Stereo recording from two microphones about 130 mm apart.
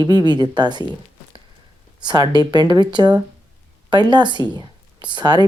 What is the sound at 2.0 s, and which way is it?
Speech, 35° right (ahead or behind).